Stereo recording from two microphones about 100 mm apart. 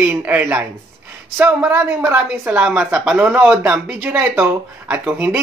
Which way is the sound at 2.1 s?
15° right (ahead or behind).